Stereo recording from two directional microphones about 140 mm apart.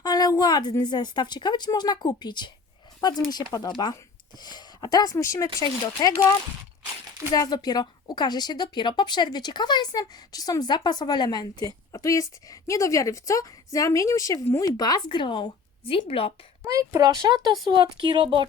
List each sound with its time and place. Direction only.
0.0 s a woman's voice: 30° left (ahead or behind)
7.3 s a woman's voice: 30° left (ahead or behind)
16.6 s speech: 25° right (ahead or behind)